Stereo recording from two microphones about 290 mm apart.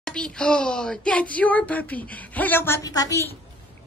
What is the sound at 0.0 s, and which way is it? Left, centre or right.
Speech, centre.